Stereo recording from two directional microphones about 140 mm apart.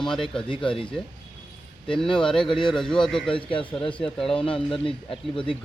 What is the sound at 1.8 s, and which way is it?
Speech, 5° left (ahead or behind).